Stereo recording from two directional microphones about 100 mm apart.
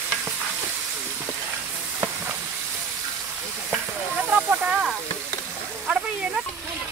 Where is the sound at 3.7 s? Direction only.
15° right (ahead or behind).